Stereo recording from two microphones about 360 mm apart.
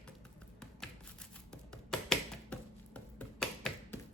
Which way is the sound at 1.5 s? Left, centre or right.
Centre.